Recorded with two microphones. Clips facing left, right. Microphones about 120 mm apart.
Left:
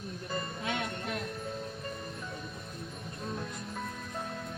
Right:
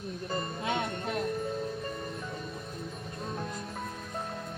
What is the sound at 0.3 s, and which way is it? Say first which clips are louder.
Music: right 3 dB; 30° right (ahead or behind).